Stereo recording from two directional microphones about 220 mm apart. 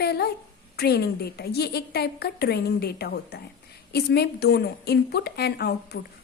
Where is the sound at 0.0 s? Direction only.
45° left (ahead or behind).